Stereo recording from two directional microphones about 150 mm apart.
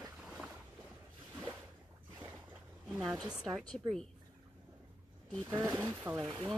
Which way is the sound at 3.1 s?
25° right (ahead or behind).